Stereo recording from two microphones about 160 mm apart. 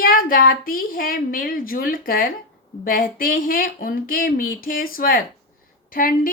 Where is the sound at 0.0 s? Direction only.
60° left (ahead or behind).